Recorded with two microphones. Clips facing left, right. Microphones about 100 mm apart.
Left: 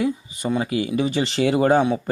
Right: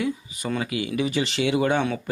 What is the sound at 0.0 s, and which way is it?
Speech, 30° left (ahead or behind).